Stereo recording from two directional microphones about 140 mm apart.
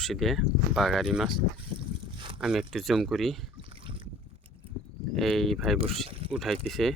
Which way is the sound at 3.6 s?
40° right (ahead or behind).